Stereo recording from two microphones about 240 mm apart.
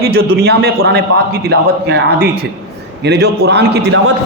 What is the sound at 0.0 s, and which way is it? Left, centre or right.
A man's voice, right.